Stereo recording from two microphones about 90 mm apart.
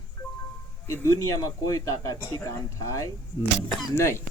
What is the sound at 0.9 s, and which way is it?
Speech, 30° left (ahead or behind).